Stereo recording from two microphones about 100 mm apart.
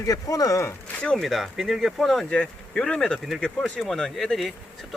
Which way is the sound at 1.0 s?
5° left (ahead or behind).